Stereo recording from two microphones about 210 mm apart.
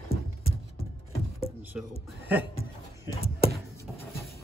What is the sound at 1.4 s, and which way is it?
Music, 25° left (ahead or behind).